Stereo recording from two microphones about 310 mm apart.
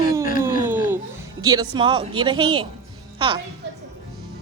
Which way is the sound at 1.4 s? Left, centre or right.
Centre.